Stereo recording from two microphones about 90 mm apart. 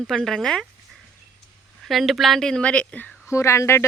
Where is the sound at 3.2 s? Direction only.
30° left (ahead or behind).